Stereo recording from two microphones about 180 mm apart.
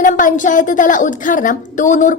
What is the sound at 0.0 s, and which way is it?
A woman's voice, 45° left (ahead or behind).